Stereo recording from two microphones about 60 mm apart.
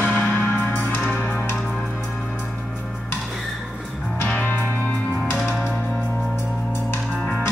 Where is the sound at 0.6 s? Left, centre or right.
Left.